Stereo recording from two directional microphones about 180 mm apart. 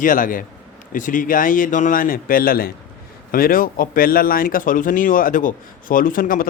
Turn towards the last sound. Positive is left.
turn(degrees=50)  # may be behind; listen again after turning